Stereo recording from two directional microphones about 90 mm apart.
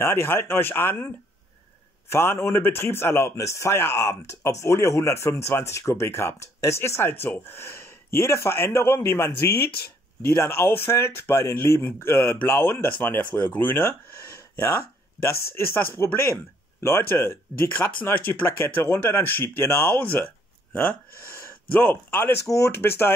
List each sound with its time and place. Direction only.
0.0 s a man's voice: 25° left (ahead or behind)
15.2 s a man's voice: 25° left (ahead or behind)
22.4 s a man's voice: 35° left (ahead or behind)